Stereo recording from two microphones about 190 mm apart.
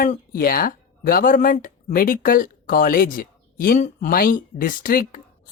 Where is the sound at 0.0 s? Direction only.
45° left (ahead or behind).